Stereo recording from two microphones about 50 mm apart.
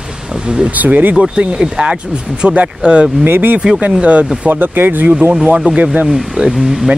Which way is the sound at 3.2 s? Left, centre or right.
Right.